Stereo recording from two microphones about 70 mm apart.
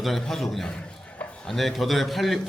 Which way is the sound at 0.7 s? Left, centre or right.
Centre.